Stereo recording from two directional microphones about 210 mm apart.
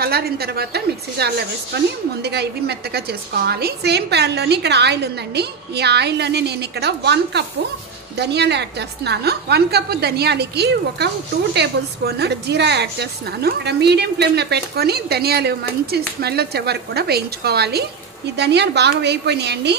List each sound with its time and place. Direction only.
0.0 s a woman's voice: 50° right (ahead or behind)
12.2 s a woman's voice: 55° right (ahead or behind)